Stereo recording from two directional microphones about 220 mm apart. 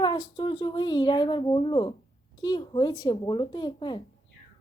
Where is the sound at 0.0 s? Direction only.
20° left (ahead or behind).